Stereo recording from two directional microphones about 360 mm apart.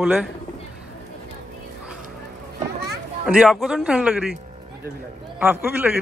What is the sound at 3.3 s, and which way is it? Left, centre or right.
Speech, centre.